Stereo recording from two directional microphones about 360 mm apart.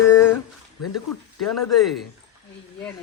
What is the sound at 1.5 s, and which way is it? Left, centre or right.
Speech, left.